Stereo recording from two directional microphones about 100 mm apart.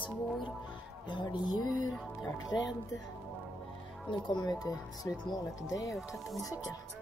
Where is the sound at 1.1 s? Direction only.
50° left (ahead or behind).